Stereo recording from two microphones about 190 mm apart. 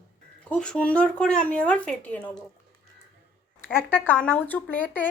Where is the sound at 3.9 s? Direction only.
10° left (ahead or behind).